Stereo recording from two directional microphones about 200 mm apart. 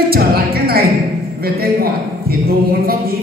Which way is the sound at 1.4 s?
50° right (ahead or behind).